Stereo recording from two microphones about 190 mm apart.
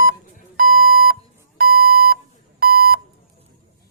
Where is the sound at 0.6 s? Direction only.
50° right (ahead or behind).